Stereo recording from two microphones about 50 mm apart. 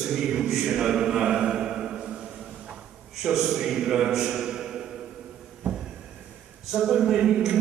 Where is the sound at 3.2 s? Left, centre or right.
Centre.